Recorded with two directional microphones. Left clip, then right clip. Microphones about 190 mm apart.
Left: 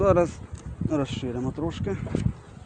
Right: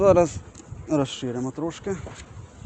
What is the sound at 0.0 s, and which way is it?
Speech, 30° right (ahead or behind).